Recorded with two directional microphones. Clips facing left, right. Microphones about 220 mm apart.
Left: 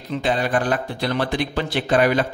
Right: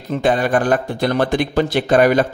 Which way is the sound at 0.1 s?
50° right (ahead or behind).